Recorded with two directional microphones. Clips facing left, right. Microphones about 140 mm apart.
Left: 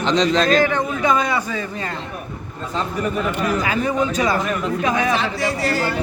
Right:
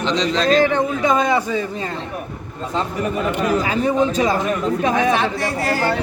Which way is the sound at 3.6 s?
30° right (ahead or behind).